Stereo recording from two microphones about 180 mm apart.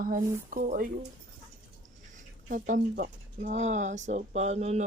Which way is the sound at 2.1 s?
45° right (ahead or behind).